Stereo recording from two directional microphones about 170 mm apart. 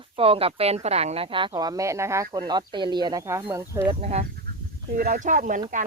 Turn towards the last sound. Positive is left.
turn(degrees=-50)  # may be behind; listen again after turning